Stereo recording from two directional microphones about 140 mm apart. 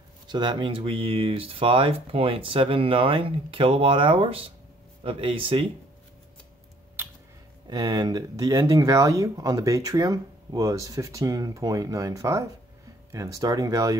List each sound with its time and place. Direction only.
0.3 s speech: 35° right (ahead or behind)
7.0 s a sound: 15° right (ahead or behind)
7.6 s speech: 30° right (ahead or behind)